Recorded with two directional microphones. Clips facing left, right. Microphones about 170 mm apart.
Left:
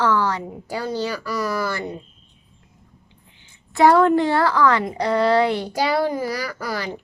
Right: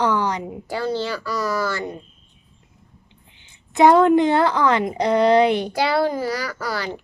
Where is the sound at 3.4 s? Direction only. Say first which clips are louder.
Right 1 dB; 20° right (ahead or behind).